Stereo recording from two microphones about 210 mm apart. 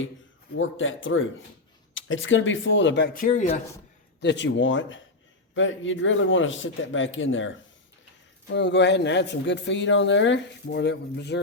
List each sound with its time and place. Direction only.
0.6 s speech: 65° left (ahead or behind)
3.2 s speech: 35° left (ahead or behind)
4.2 s speech: 55° left (ahead or behind)